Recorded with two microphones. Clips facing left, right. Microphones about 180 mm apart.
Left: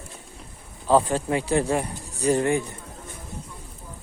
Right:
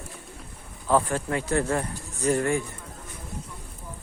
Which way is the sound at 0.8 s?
20° left (ahead or behind).